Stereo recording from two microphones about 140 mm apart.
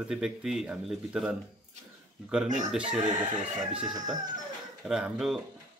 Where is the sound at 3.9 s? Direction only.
25° right (ahead or behind).